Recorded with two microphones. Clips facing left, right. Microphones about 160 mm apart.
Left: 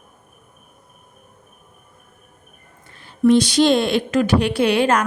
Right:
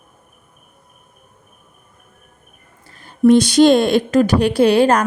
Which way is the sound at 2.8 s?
40° right (ahead or behind).